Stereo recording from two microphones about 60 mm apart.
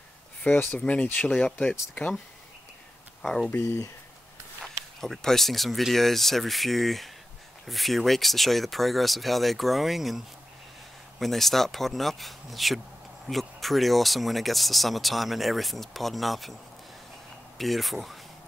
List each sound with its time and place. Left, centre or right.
0.7 s speech: centre
5.0 s speech: centre
17.6 s speech: centre